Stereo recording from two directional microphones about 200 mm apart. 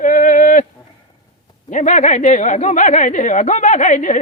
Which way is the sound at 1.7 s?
40° left (ahead or behind).